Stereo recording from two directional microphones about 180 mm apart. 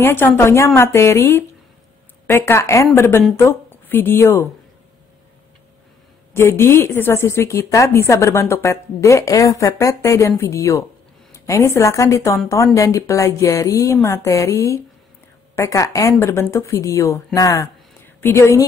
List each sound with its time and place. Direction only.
0.0 s a woman's voice: 10° left (ahead or behind)
6.3 s a woman's voice: 15° left (ahead or behind)